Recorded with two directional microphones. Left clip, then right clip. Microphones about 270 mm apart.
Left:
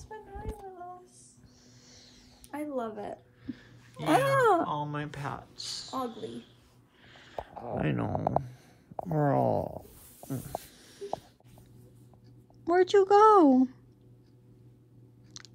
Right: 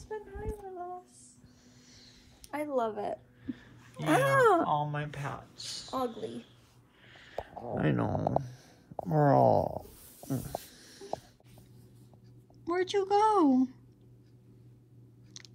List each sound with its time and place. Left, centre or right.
2.5 s speech: centre
2.8 s a sound: centre
4.0 s speech: left
4.3 s speech: centre
7.3 s a sound: centre
7.7 s speech: centre
12.6 s speech: centre
15.3 s chewing: centre